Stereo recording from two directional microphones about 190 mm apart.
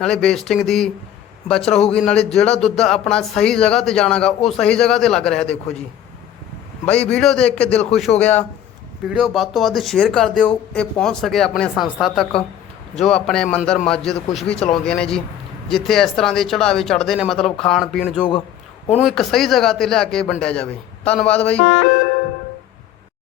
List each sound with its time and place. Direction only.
0.0 s speech: 5° left (ahead or behind)
6.8 s a man's voice: 5° left (ahead or behind)
21.6 s music: 55° left (ahead or behind)